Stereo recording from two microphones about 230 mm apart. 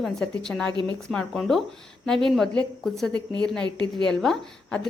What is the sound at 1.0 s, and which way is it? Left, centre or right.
A woman's voice, centre.